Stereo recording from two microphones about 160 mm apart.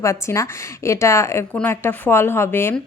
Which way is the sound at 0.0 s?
20° left (ahead or behind).